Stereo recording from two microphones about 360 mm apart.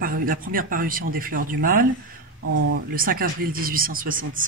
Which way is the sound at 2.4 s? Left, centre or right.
Right.